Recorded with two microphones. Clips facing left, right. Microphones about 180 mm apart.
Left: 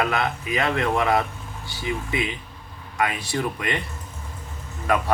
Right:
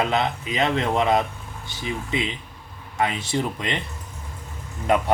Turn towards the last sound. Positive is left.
turn(degrees=-25)  # may be behind; listen again after turning